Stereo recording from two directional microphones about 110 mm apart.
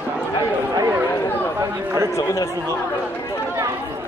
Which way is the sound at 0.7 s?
35° right (ahead or behind).